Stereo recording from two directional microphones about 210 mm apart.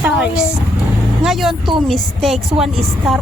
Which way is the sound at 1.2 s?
Centre (ahead or behind).